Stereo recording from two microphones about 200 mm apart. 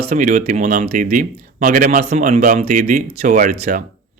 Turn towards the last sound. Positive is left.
turn(degrees=-40)  # may be behind; listen again after turning